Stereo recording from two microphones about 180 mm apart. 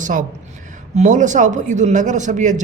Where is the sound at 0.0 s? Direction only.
45° right (ahead or behind).